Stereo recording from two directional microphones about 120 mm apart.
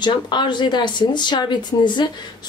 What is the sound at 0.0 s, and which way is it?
Speech, 40° left (ahead or behind).